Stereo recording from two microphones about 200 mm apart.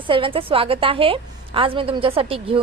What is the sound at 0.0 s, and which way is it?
A woman's voice, 25° right (ahead or behind).